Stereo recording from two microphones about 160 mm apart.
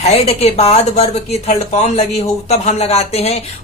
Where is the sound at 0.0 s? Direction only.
40° left (ahead or behind).